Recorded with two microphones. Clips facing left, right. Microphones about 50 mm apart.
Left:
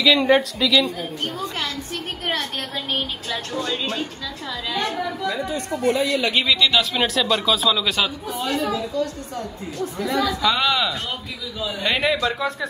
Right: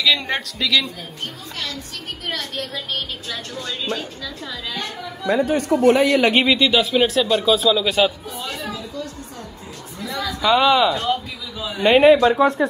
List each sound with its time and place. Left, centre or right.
0.0 s speech: centre
2.2 s a woman's voice: left
2.7 s a woman's voice: centre
5.4 s speech: right
6.0 s a man's voice: right
6.4 s a man's voice: right
10.4 s a man's voice: centre
11.8 s speech: right